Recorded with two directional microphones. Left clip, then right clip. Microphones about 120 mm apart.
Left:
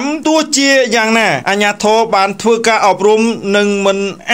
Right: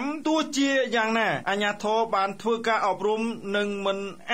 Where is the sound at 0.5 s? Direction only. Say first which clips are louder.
Left 13 dB; 40° left (ahead or behind).